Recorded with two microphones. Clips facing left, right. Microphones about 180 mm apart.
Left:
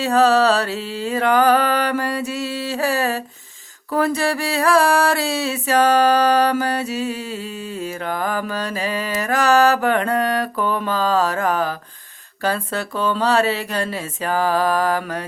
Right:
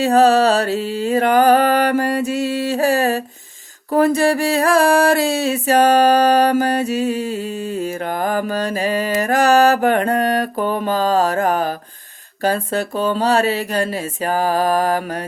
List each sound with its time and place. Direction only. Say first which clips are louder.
0.0 s mantra: right 3 dB; 50° right (ahead or behind)